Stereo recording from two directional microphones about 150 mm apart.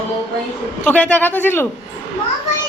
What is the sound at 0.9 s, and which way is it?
Speech, 10° left (ahead or behind).